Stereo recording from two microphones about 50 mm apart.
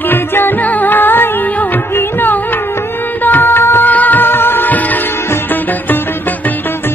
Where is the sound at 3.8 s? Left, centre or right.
Left.